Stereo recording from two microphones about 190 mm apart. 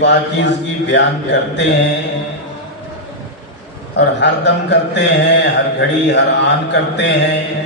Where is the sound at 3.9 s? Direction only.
65° left (ahead or behind).